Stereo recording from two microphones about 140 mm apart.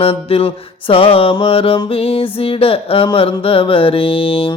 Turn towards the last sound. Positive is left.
turn(degrees=40)  # may be behind; listen again after turning